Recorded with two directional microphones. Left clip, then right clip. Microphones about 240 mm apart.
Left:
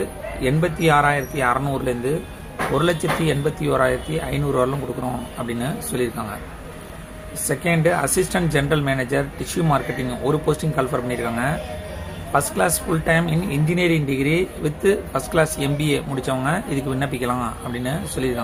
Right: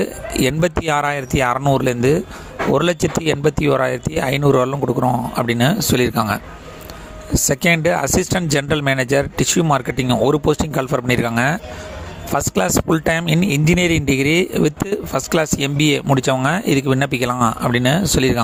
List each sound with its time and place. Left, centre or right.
0.4 s speech: right
7.4 s speech: right